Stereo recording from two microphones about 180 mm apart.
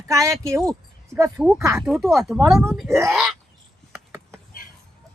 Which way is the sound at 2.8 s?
15° right (ahead or behind).